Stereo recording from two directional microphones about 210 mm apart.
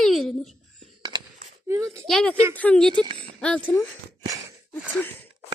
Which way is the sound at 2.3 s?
10° right (ahead or behind).